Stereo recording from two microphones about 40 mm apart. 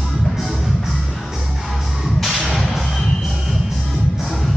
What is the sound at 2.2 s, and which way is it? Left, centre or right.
Music, centre.